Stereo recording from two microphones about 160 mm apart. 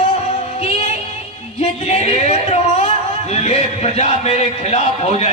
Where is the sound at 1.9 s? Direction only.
40° left (ahead or behind).